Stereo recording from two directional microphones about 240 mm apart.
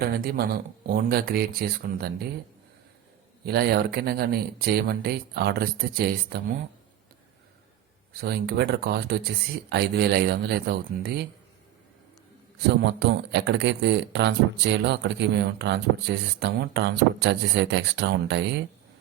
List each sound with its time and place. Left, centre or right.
0.0 s speech: right
3.4 s speech: right
8.2 s a man's voice: right
12.6 s a man's voice: right